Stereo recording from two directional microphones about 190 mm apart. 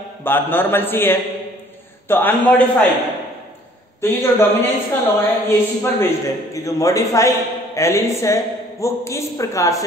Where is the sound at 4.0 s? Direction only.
15° left (ahead or behind).